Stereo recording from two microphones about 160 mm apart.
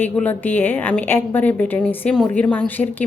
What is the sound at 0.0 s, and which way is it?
A woman's voice, 10° left (ahead or behind).